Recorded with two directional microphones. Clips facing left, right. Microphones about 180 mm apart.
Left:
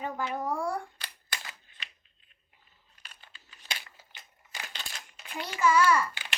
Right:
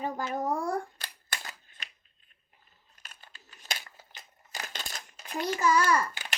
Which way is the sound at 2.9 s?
45° right (ahead or behind).